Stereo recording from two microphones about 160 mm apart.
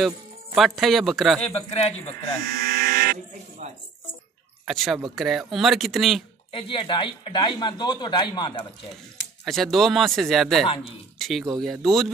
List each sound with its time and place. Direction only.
0.6 s speech: centre (ahead or behind)
1.8 s speech: 40° left (ahead or behind)
2.4 s electric shaver: 90° right; by 3.2 s 65° right (ahead or behind)
3.6 s speech: 45° right (ahead or behind)
4.6 s speech: centre (ahead or behind)
6.5 s speech: 30° left (ahead or behind)
9.4 s speech: centre (ahead or behind)
10.6 s speech: 35° left (ahead or behind)
11.1 s speech: centre (ahead or behind)